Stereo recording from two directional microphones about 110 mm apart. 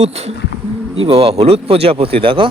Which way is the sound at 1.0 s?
60° right (ahead or behind).